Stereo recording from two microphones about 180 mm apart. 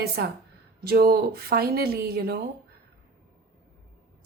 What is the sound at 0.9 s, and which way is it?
A woman's voice, 55° right (ahead or behind).